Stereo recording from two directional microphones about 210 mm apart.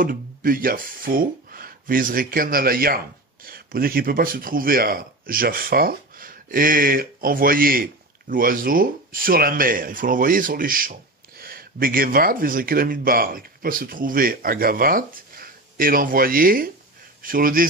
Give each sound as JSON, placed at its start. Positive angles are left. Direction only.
{"t": 0.0, "sound": "speech", "side_deg": -40}